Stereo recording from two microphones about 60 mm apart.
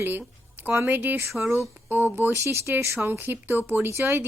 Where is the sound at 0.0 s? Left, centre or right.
Right.